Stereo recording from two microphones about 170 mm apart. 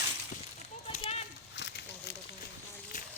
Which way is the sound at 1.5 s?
85° left.